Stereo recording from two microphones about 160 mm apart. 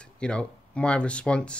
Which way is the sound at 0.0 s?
5° left (ahead or behind).